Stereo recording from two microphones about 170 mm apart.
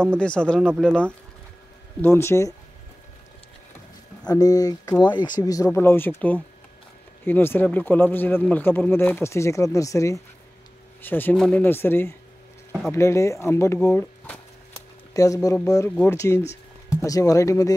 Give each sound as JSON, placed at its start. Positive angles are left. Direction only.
{"t": 0.0, "sound": "speech", "side_deg": 5}
{"t": 2.0, "sound": "speech", "side_deg": 15}
{"t": 4.3, "sound": "speech", "side_deg": 20}